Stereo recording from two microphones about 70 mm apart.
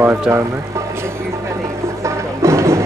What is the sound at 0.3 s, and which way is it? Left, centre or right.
Vehicle, right.